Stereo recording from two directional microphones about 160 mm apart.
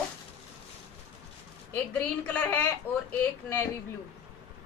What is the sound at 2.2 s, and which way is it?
A woman's voice, 10° left (ahead or behind).